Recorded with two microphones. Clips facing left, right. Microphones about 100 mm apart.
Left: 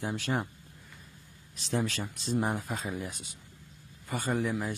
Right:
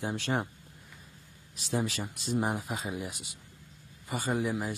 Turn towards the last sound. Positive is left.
turn(degrees=-10)  # may be behind; listen again after turning